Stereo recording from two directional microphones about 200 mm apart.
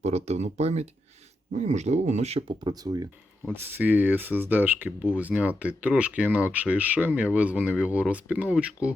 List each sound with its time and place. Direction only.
0.0 s speech: 35° right (ahead or behind)
2.6 s speech: 20° right (ahead or behind)